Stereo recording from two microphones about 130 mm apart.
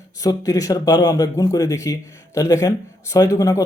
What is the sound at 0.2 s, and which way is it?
Speech, 30° left (ahead or behind).